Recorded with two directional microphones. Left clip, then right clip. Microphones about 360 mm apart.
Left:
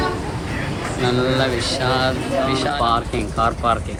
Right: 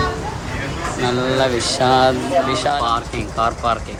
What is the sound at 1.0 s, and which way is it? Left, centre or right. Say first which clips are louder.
Speech: right 1 dB; centre.